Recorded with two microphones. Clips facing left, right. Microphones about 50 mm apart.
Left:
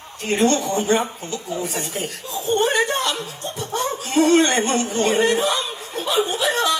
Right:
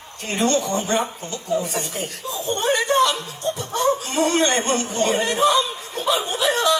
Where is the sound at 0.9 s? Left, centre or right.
Left.